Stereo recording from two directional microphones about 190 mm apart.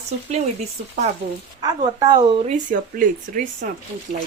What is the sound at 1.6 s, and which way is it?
Speech, 20° right (ahead or behind).